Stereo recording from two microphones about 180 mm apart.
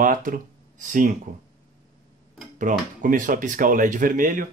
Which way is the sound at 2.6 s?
45° right (ahead or behind).